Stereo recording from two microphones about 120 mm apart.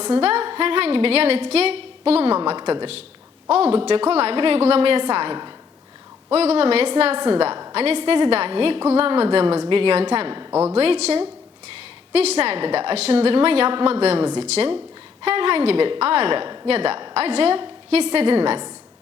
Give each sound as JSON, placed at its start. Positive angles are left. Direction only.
{"t": 0.0, "sound": "a woman's voice", "side_deg": -50}
{"t": 2.4, "sound": "a woman's voice", "side_deg": -45}
{"t": 3.5, "sound": "a woman's voice", "side_deg": -55}
{"t": 6.3, "sound": "a woman's voice", "side_deg": -60}
{"t": 10.5, "sound": "a woman's voice", "side_deg": -20}
{"t": 10.8, "sound": "a woman's voice", "side_deg": -60}